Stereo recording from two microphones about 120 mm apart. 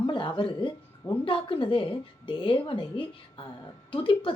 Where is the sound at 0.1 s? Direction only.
45° left (ahead or behind).